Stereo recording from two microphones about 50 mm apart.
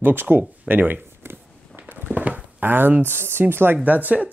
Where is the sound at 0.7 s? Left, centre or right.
Right.